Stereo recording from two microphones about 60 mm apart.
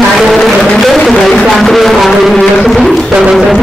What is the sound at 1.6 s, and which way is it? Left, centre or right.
A man's voice, centre.